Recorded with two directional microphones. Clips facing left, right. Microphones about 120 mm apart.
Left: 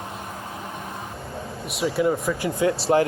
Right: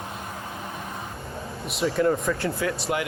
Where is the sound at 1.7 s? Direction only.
5° left (ahead or behind).